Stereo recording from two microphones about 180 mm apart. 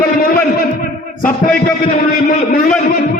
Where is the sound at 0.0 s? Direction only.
55° left (ahead or behind).